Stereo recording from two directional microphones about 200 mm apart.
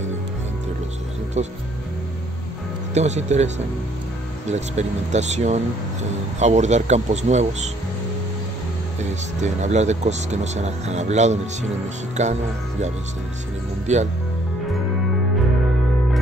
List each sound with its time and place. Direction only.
2.9 s speech: 35° right (ahead or behind)
9.4 s speech: 35° right (ahead or behind)
13.9 s speech: 35° right (ahead or behind)